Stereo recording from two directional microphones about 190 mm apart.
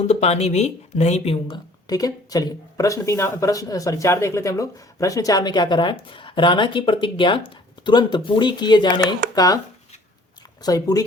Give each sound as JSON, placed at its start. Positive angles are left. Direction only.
{"t": 0.1, "sound": "speech", "side_deg": 35}
{"t": 1.9, "sound": "speech", "side_deg": 20}
{"t": 10.6, "sound": "speech", "side_deg": 20}